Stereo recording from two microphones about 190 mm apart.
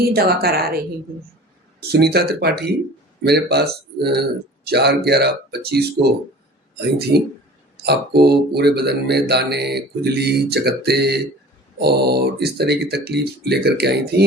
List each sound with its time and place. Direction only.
0.1 s speech: 55° right (ahead or behind)
1.9 s speech: 60° right (ahead or behind)